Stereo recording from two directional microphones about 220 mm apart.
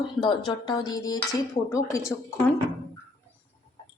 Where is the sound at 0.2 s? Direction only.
20° left (ahead or behind).